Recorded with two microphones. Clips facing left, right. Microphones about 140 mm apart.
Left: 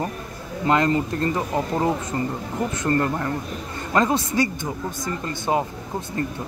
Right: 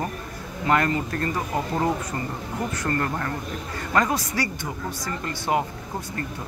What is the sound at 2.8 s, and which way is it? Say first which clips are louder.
Speech: left 5 dB; 20° left (ahead or behind).